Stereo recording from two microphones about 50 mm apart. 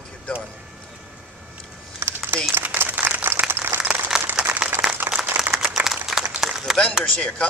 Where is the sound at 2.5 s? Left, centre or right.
Right.